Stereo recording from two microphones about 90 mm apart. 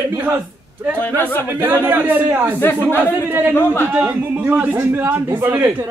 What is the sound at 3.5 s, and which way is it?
Speech, 25° left (ahead or behind).